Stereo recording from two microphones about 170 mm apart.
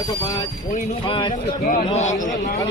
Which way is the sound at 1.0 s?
30° left (ahead or behind).